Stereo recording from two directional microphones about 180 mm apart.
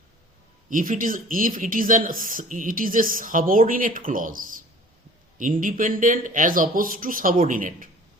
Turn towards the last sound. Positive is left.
turn(degrees=-50)  # may be behind; listen again after turning